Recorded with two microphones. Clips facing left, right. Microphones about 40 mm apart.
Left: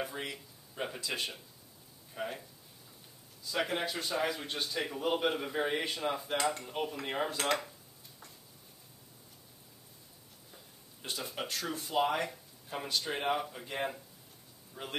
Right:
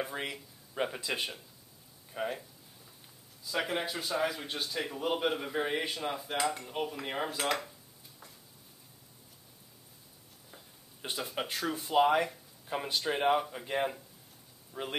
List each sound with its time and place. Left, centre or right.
0.9 s a man's voice: centre
2.1 s a man's voice: centre
3.4 s a man's voice: centre
10.5 s a sound: centre
11.4 s a man's voice: centre
14.7 s speech: centre